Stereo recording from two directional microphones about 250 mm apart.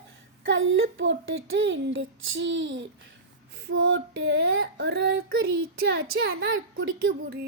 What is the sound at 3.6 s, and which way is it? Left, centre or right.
Child singing, right.